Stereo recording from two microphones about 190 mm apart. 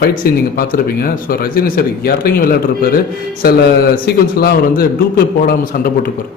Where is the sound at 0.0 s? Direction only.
55° left (ahead or behind).